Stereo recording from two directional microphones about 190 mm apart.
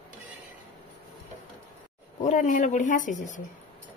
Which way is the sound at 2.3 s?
45° left (ahead or behind).